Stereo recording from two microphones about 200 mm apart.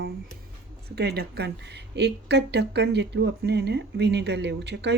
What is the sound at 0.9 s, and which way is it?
Speech, 50° right (ahead or behind).